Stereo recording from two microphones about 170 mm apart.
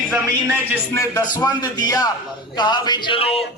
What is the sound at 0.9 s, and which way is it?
A man's voice, 20° left (ahead or behind).